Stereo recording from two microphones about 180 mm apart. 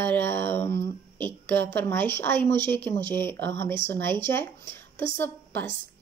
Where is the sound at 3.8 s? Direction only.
15° left (ahead or behind).